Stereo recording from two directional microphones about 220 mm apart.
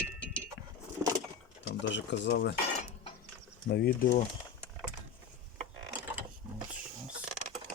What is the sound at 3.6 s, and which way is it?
Speech, 45° left (ahead or behind).